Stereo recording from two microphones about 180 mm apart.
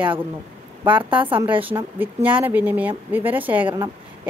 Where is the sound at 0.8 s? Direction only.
30° right (ahead or behind).